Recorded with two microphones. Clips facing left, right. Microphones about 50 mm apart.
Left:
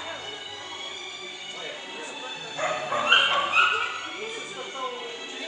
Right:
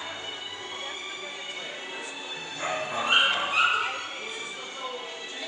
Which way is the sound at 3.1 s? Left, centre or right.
Left.